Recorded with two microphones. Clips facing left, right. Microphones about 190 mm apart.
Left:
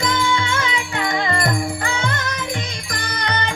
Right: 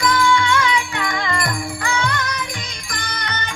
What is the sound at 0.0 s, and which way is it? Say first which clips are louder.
Music: right 3 dB; 20° left (ahead or behind).